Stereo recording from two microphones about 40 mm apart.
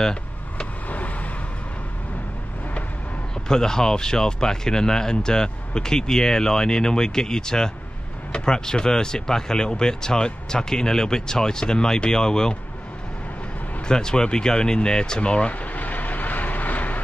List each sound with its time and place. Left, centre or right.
0.0 s vehicle: left
0.8 s vehicle: left
3.4 s speech: centre
13.8 s speech: centre
15.6 s vehicle: left